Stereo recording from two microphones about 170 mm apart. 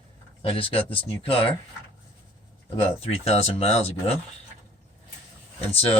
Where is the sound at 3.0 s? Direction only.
35° left (ahead or behind).